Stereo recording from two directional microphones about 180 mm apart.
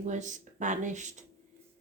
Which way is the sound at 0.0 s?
45° right (ahead or behind).